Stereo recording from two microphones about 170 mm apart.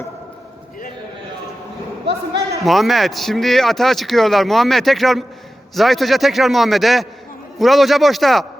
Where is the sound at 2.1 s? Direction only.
80° right.